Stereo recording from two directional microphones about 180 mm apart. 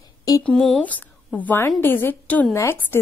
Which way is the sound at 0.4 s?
5° left (ahead or behind).